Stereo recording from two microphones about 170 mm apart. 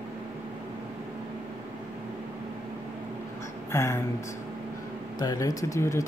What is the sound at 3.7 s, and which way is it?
Speech, 15° left (ahead or behind).